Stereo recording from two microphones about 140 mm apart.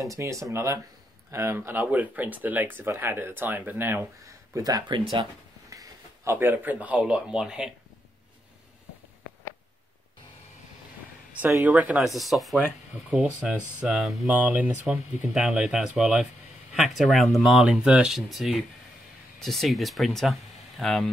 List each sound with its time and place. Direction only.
0.0 s speech: 20° right (ahead or behind)
4.6 s speech: 30° right (ahead or behind); by 7.7 s 5° right (ahead or behind)
11.5 s speech: 10° right (ahead or behind)
12.1 s speech: centre (ahead or behind)